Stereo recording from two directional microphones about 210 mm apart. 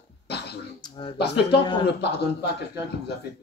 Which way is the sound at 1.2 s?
50° left (ahead or behind).